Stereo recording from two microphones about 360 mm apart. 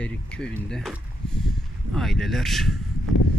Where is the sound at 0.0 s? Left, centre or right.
Centre.